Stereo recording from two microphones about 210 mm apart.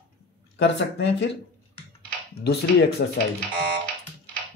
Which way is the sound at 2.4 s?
50° left (ahead or behind).